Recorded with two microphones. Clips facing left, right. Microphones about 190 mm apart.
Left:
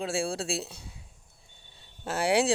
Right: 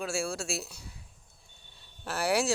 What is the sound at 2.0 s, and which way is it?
Speech, 25° left (ahead or behind).